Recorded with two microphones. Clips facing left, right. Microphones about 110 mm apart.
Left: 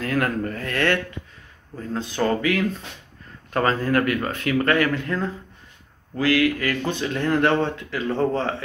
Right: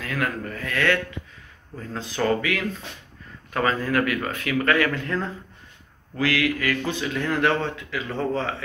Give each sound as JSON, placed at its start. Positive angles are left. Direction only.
{"t": 0.0, "sound": "speech", "side_deg": 40}
{"t": 2.0, "sound": "speech", "side_deg": 25}
{"t": 7.7, "sound": "speech", "side_deg": 40}